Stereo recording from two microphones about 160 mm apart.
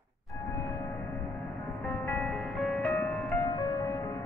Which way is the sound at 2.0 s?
10° left (ahead or behind).